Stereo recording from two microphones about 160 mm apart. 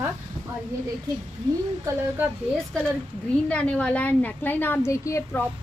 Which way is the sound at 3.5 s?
5° left (ahead or behind).